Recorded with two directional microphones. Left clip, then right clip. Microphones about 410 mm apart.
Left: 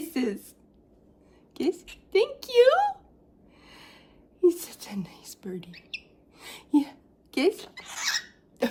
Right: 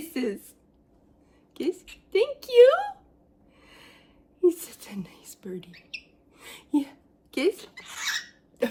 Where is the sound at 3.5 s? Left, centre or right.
Centre.